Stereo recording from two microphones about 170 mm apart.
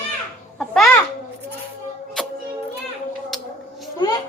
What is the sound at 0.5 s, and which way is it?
Babbling, centre (ahead or behind).